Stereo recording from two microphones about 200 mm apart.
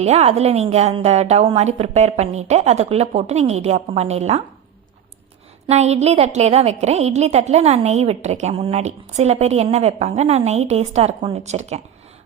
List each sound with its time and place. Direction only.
0.0 s a woman's voice: 30° right (ahead or behind)
5.6 s a woman's voice: 35° right (ahead or behind)